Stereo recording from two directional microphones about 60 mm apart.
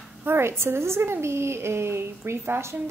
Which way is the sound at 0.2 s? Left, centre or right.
Right.